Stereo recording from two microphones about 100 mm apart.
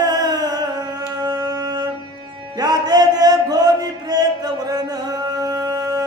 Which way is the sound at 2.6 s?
40° right (ahead or behind).